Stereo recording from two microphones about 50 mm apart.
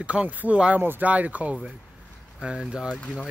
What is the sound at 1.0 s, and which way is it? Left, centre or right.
Speech, right.